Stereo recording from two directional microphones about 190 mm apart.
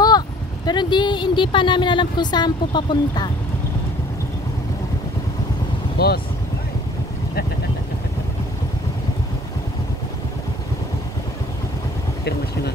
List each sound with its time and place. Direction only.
0.7 s speech: 25° left (ahead or behind)
5.9 s speech: 55° left (ahead or behind)